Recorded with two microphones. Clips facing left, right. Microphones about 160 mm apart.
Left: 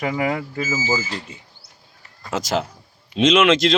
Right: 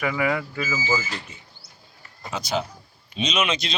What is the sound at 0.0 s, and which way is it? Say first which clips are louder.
Speech: left 2 dB; 30° left (ahead or behind).